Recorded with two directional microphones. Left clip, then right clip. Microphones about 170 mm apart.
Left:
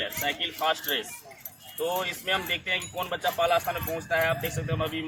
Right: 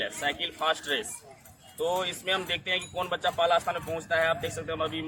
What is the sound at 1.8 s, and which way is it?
Speech, 15° right (ahead or behind).